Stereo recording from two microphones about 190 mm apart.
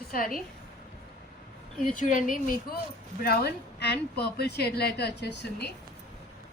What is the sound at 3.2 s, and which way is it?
A woman's voice, 60° left (ahead or behind).